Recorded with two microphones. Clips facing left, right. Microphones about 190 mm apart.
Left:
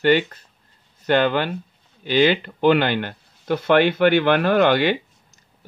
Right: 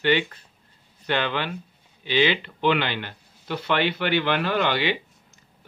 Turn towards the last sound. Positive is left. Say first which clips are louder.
# left 5 dB
turn(degrees=45)  # may be behind; listen again after turning